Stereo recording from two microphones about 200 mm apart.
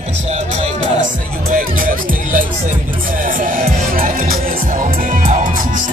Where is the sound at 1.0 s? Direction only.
40° right (ahead or behind).